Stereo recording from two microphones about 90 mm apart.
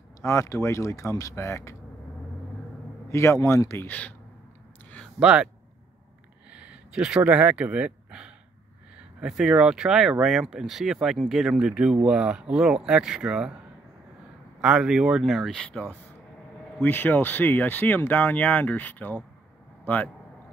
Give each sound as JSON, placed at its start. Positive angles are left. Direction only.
{"t": 0.2, "sound": "speech", "side_deg": 35}
{"t": 3.1, "sound": "speech", "side_deg": 35}
{"t": 5.2, "sound": "speech", "side_deg": -10}
{"t": 6.5, "sound": "a sound", "side_deg": -15}
{"t": 8.9, "sound": "speech", "side_deg": -10}
{"t": 14.6, "sound": "speech", "side_deg": -5}